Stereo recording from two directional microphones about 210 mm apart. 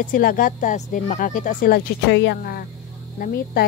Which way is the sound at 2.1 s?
55° left (ahead or behind).